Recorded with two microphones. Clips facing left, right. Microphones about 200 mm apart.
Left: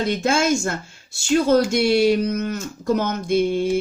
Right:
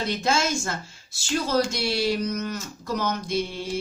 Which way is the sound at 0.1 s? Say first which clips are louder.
Left 5 dB; 50° left (ahead or behind).